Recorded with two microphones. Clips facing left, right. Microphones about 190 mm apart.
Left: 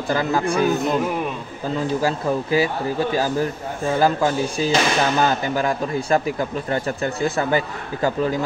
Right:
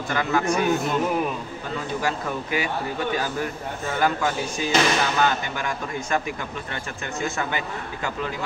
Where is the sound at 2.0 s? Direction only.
35° left (ahead or behind).